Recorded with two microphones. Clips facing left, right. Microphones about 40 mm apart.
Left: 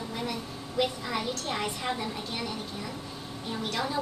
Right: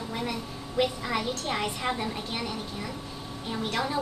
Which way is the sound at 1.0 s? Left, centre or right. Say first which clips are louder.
Right 2 dB; centre.